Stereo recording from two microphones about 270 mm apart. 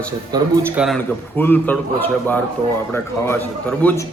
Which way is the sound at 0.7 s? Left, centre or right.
Centre.